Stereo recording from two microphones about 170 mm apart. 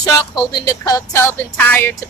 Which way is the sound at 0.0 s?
20° left (ahead or behind).